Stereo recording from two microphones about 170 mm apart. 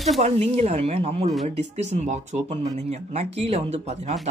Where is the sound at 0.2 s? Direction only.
40° right (ahead or behind).